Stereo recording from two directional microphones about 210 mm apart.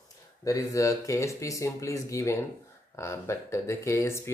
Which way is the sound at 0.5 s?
15° left (ahead or behind).